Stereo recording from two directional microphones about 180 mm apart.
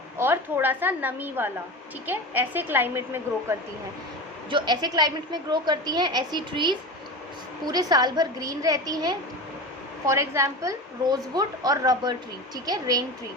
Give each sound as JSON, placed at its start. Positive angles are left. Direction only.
{"t": 0.2, "sound": "a woman's voice", "side_deg": -10}
{"t": 4.4, "sound": "a woman's voice", "side_deg": -25}